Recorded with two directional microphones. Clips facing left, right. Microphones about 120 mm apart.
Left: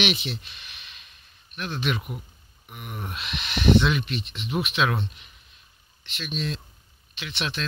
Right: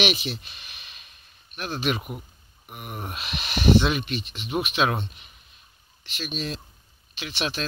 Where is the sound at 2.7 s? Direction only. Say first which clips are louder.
Right 1 dB; 20° right (ahead or behind).